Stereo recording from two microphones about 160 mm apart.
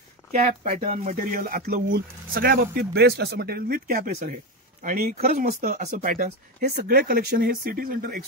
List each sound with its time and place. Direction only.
0.7 s speech: 45° right (ahead or behind); by 8.2 s 65° right (ahead or behind)